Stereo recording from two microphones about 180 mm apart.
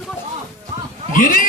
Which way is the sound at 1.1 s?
50° left (ahead or behind).